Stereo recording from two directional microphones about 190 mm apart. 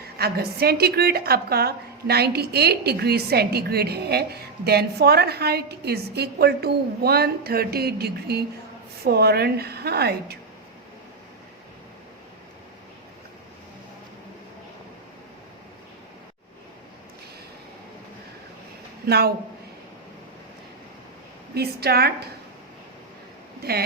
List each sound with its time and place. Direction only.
0.2 s a woman's voice: 55° right (ahead or behind)
19.0 s a woman's voice: 55° right (ahead or behind)
21.5 s a woman's voice: 55° right (ahead or behind)